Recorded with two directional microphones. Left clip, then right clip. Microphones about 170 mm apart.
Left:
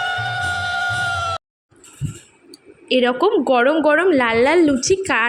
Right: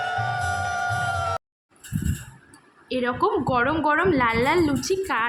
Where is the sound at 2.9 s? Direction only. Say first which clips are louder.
Left 7 dB; 30° left (ahead or behind).